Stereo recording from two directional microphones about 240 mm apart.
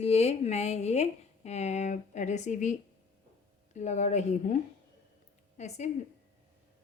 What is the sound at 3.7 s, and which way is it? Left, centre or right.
A woman's voice, left.